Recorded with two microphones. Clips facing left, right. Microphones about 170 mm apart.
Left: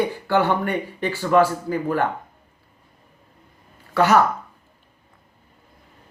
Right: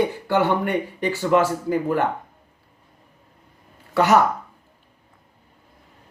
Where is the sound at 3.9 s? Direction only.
20° right (ahead or behind).